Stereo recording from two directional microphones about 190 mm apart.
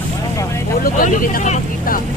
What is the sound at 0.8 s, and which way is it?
Speech, 50° left (ahead or behind).